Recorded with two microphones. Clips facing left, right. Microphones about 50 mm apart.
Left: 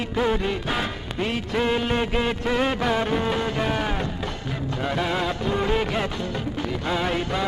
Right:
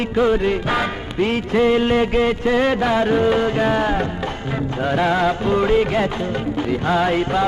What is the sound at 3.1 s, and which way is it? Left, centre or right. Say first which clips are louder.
Music of bollywood: right 7 dB; centre.